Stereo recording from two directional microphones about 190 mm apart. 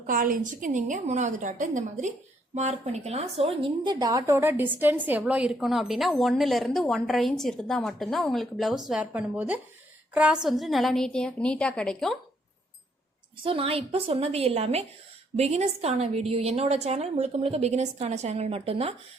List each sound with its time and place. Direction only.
0.0 s a woman's voice: 45° right (ahead or behind); by 3.9 s 30° right (ahead or behind)
3.9 s a woman's voice: 15° right (ahead or behind); by 12.1 s 5° left (ahead or behind)
13.4 s a woman's voice: 30° right (ahead or behind)